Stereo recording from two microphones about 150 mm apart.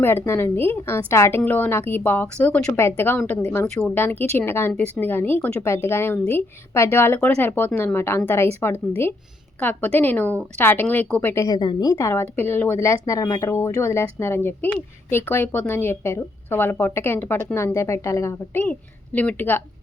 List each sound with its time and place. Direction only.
0.0 s a woman's voice: 15° left (ahead or behind)
11.4 s a woman's voice: 30° left (ahead or behind); by 19.6 s 15° left (ahead or behind)